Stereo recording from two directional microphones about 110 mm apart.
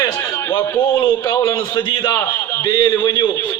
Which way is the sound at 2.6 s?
40° left (ahead or behind).